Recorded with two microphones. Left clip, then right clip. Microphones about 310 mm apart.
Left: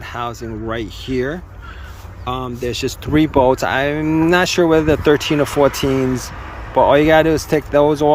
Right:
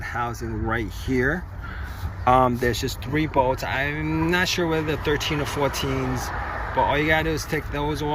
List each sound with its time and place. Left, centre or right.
0.1 s speech: centre
2.8 s speech: centre